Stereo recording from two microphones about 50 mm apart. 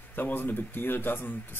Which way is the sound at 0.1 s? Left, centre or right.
Left.